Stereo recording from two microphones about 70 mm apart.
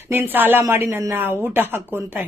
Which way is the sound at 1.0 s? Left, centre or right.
Right.